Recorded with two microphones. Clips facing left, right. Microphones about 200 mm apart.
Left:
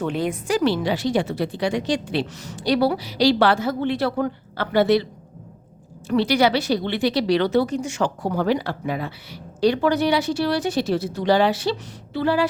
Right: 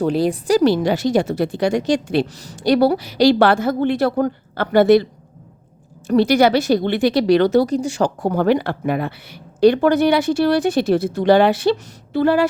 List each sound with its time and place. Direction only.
0.0 s speech: 35° right (ahead or behind)
6.1 s speech: 45° right (ahead or behind)
8.2 s speech: 55° right (ahead or behind)